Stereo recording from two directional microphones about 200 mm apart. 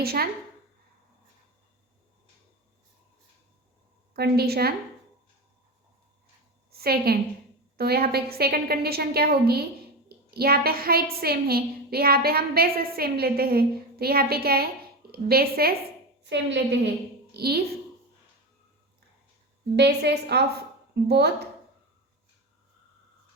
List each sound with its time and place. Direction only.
0.0 s a woman's voice: 50° right (ahead or behind)
4.1 s a woman's voice: 50° right (ahead or behind)
6.7 s a woman's voice: 50° right (ahead or behind)
19.7 s a woman's voice: 55° right (ahead or behind)